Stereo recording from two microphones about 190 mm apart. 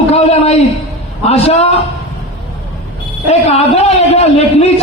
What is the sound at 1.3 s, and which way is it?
Speech, 35° left (ahead or behind).